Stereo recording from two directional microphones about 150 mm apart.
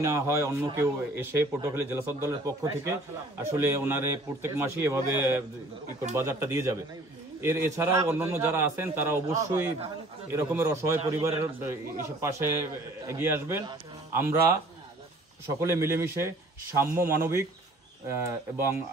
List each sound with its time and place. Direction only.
0.0 s a man's voice: 20° right (ahead or behind)
15.7 s a man's voice: 20° right (ahead or behind)